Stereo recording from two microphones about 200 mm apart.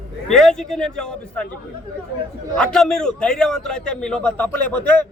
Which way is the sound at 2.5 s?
5° left (ahead or behind).